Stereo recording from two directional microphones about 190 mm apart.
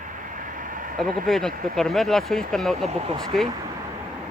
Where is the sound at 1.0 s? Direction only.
45° right (ahead or behind).